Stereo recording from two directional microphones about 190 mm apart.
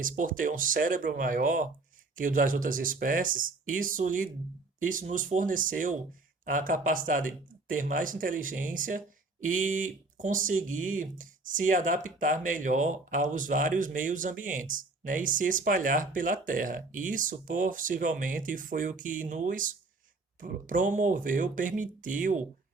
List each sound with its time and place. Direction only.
0.0 s speech: 45° right (ahead or behind)